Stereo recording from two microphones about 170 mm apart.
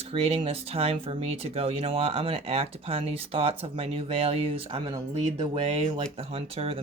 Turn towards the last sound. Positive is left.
turn(degrees=-35)  # may be behind; listen again after turning